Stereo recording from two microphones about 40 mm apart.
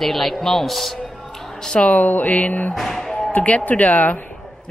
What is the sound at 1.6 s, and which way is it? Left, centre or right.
Speech, left.